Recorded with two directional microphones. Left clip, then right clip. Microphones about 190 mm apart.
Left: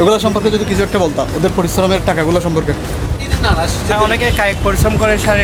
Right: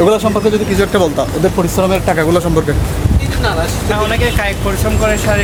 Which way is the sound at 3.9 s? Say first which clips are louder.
Left 3 dB; 15° left (ahead or behind).